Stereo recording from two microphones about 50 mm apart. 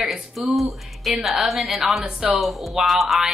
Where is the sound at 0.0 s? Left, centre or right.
Centre.